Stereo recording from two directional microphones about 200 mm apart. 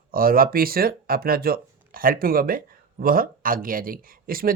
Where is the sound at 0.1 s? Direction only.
45° right (ahead or behind).